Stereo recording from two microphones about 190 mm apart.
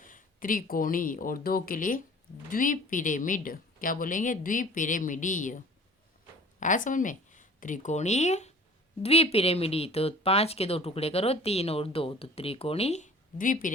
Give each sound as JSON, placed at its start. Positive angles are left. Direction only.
{"t": 0.0, "sound": "speech", "side_deg": 45}